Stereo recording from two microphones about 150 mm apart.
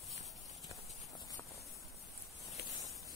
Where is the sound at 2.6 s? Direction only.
90° left.